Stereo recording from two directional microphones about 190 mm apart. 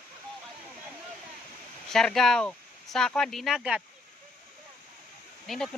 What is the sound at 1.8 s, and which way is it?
Speech, centre (ahead or behind).